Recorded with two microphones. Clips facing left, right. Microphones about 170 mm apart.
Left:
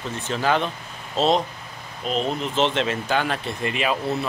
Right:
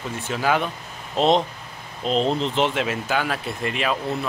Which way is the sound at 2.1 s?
30° right (ahead or behind).